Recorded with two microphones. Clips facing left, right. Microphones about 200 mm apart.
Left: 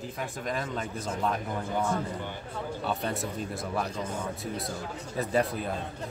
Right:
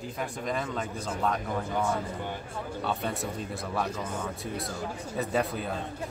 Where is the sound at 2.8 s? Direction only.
Centre (ahead or behind).